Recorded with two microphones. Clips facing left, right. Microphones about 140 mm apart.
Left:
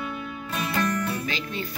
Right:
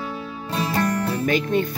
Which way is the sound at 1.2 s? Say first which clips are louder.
Right 11 dB; 50° right (ahead or behind).